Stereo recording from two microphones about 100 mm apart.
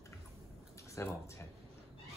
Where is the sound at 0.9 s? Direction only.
30° left (ahead or behind).